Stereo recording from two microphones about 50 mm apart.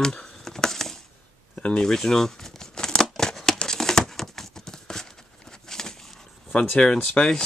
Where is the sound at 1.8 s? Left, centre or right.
Centre.